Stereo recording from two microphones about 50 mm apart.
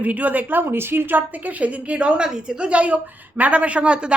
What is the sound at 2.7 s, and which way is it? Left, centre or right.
A woman's voice, right.